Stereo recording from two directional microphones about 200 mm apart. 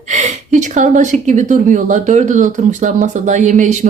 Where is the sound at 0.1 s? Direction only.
35° right (ahead or behind).